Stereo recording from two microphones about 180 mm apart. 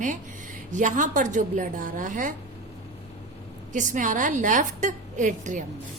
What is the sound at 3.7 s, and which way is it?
A woman's voice, 45° right (ahead or behind).